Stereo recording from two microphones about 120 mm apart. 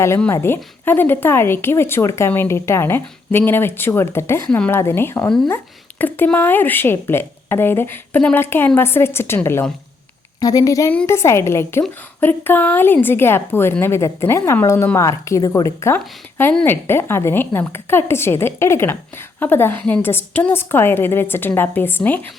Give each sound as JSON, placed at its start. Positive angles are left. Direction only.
{"t": 0.4, "sound": "a woman's voice", "side_deg": 20}
{"t": 4.4, "sound": "a woman's voice", "side_deg": 10}
{"t": 4.7, "sound": "a woman's voice", "side_deg": 20}